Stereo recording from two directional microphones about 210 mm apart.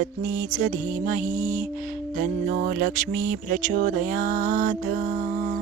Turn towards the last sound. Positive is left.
turn(degrees=-40)  # may be behind; listen again after turning